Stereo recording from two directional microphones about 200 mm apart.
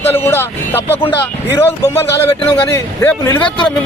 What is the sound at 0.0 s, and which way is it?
A man's voice, 10° left (ahead or behind).